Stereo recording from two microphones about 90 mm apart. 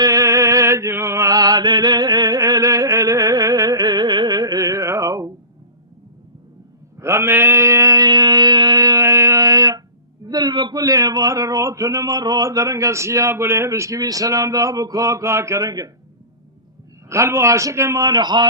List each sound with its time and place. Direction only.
0.0 s music: 40° right (ahead or behind)
4.9 s a sound: 40° right (ahead or behind)
7.0 s a sound: 30° right (ahead or behind); by 9.8 s 45° right (ahead or behind)
10.2 s a man's voice: 50° right (ahead or behind)
17.1 s speech: 30° right (ahead or behind)
18.0 s a man's voice: 50° right (ahead or behind)